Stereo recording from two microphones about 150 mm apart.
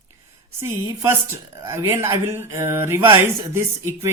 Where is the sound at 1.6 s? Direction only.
15° right (ahead or behind).